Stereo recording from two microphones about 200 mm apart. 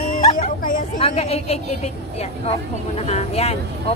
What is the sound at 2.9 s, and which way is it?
Speech, 30° left (ahead or behind).